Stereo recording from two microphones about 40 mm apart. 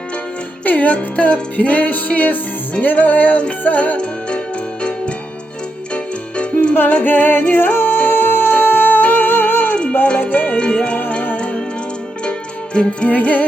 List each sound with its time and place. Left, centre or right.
0.6 s music: left
7.0 s music: left
10.2 s music: left
12.7 s music: left
13.1 s music: left